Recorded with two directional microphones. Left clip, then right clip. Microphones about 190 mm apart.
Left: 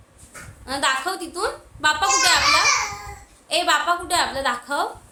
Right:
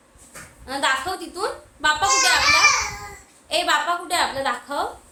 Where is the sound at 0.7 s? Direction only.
25° left (ahead or behind).